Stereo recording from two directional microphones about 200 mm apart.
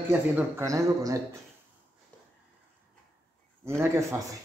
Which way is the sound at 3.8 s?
10° right (ahead or behind).